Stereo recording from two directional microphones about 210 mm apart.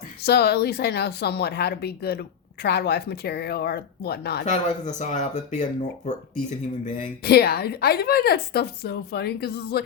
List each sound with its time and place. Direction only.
0.2 s speech: 50° left (ahead or behind)
4.4 s speech: 35° left (ahead or behind)
6.8 s speech: 45° left (ahead or behind)